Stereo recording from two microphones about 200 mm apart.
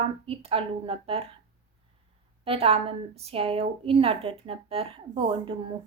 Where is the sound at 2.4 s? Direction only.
30° right (ahead or behind).